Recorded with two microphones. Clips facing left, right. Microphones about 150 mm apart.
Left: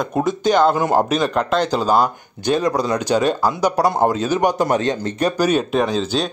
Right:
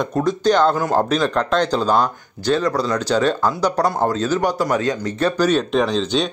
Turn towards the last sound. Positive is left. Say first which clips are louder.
# even
turn(degrees=5)  # may be behind; listen again after turning